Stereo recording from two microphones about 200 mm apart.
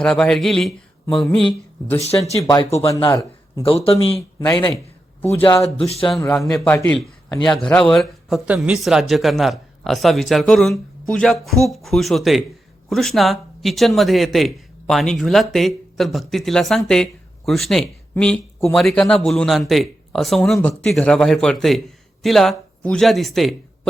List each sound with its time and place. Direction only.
0.0 s speech: 5° left (ahead or behind)
2.4 s speech: 20° left (ahead or behind)
3.6 s speech: 30° left (ahead or behind)
4.4 s speech: 15° left (ahead or behind)
5.4 s speech: 25° left (ahead or behind)
6.1 s speech: 5° left (ahead or behind)
6.3 s speech: 15° left (ahead or behind)